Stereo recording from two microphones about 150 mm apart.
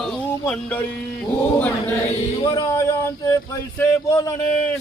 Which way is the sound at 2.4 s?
25° left (ahead or behind).